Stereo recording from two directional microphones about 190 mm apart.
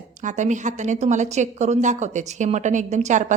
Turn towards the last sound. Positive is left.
turn(degrees=-40)  # may be behind; listen again after turning